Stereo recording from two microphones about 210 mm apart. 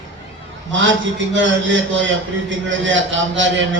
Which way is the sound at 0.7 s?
60° right (ahead or behind).